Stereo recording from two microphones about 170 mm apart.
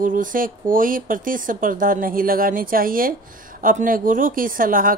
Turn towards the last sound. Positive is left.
turn(degrees=-55)  # may be behind; listen again after turning